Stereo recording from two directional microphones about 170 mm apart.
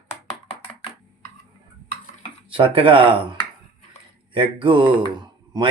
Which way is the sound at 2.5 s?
30° right (ahead or behind).